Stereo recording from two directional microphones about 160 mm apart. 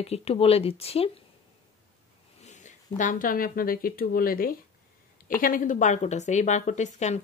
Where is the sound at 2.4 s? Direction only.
50° left (ahead or behind).